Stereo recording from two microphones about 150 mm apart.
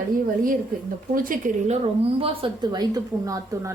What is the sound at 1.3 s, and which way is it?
Speech, 55° right (ahead or behind).